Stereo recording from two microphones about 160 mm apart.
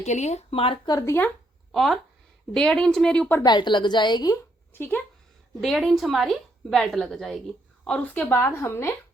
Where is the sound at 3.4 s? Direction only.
30° left (ahead or behind).